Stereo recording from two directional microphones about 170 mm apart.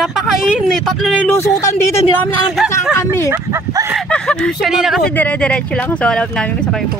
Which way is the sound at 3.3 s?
20° right (ahead or behind).